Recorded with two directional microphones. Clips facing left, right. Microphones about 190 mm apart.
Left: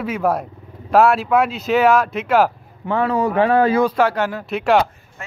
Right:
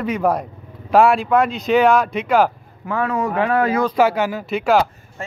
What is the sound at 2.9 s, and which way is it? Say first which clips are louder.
Speech: left 2 dB; 30° left (ahead or behind).